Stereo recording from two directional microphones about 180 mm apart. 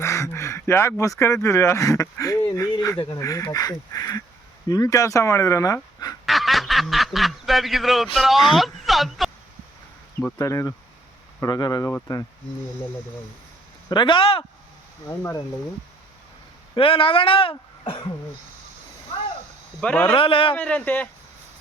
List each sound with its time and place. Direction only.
0.0 s speech: 15° left (ahead or behind)
6.2 s speech: centre (ahead or behind)
10.2 s speech: 15° left (ahead or behind)
13.9 s speech: 25° left (ahead or behind)
15.0 s speech: 15° left (ahead or behind)
16.7 s speech: 30° left (ahead or behind)
19.8 s speech: 10° left (ahead or behind)
20.1 s a man's voice: 30° left (ahead or behind)
20.6 s speech: 10° left (ahead or behind)